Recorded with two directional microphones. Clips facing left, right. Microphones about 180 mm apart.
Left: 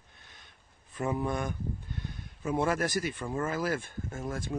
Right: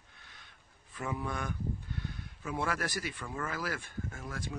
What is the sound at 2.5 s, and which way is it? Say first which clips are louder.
Speech: left 6 dB; 20° left (ahead or behind).